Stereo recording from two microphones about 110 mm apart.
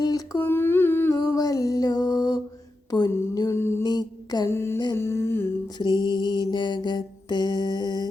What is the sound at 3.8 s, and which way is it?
Mantra, 40° left (ahead or behind).